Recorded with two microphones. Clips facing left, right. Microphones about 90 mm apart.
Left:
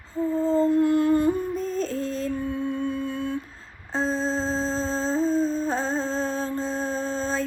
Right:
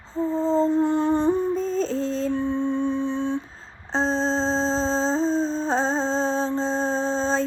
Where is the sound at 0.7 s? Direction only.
30° right (ahead or behind).